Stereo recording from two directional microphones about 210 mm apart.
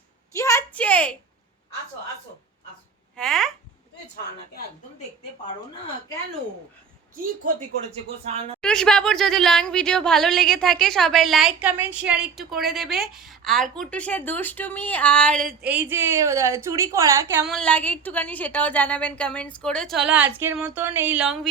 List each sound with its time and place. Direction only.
0.3 s a sound: 15° left (ahead or behind)
3.2 s a woman's voice: centre (ahead or behind)
8.2 s a woman's voice: 30° right (ahead or behind)
8.6 s a woman's voice: 5° left (ahead or behind)
15.6 s a woman's voice: 10° right (ahead or behind)
17.4 s a woman's voice: 5° left (ahead or behind)